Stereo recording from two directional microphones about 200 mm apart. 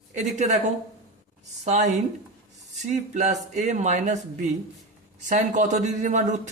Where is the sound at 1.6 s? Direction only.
35° right (ahead or behind).